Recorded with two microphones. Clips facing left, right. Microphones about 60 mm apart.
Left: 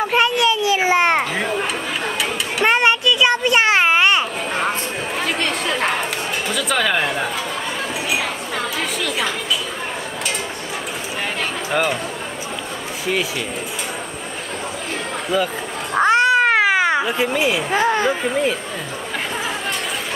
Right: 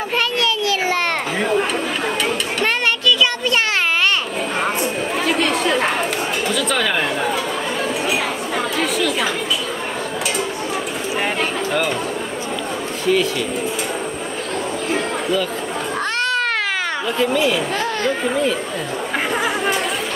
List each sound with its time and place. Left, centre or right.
0.1 s children playing: centre
1.4 s chatter: centre
2.6 s children playing: centre
5.2 s chatter: centre
8.7 s chatter: centre
13.0 s speech: centre
16.0 s cat: centre